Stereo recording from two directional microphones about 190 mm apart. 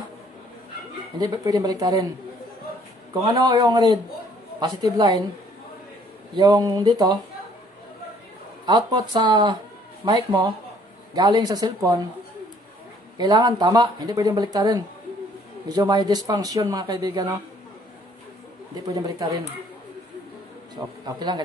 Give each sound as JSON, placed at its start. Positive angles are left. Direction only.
{"t": 1.1, "sound": "speech", "side_deg": -20}
{"t": 3.3, "sound": "speech", "side_deg": -20}
{"t": 6.3, "sound": "speech", "side_deg": -20}
{"t": 8.6, "sound": "speech", "side_deg": -20}
{"t": 13.2, "sound": "speech", "side_deg": -20}
{"t": 18.9, "sound": "speech", "side_deg": -20}
{"t": 20.7, "sound": "speech", "side_deg": -20}